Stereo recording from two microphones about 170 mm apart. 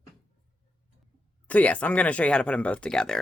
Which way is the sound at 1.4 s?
10° left (ahead or behind).